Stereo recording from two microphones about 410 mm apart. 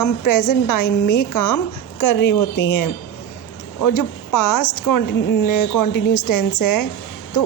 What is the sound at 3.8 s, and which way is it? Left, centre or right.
Speech, left.